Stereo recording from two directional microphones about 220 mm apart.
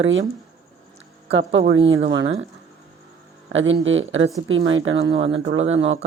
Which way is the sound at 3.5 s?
60° right (ahead or behind).